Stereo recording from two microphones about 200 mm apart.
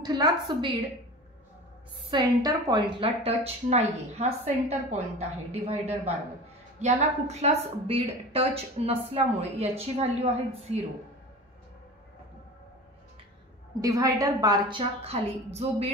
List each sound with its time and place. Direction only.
0.0 s a woman's voice: 20° right (ahead or behind)
2.0 s a woman's voice: 20° right (ahead or behind)
13.7 s a woman's voice: 15° right (ahead or behind)